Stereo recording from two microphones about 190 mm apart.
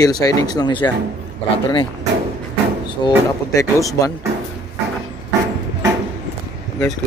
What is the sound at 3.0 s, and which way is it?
Speech, 20° left (ahead or behind).